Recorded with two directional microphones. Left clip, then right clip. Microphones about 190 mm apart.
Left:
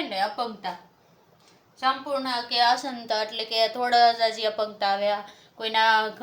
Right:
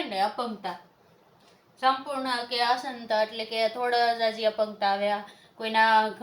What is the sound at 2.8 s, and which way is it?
A woman's voice, 50° left (ahead or behind).